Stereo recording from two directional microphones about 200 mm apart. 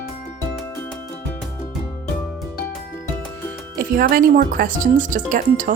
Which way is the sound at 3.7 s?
45° right (ahead or behind).